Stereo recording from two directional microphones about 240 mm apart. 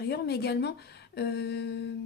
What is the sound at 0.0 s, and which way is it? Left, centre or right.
Speech, left.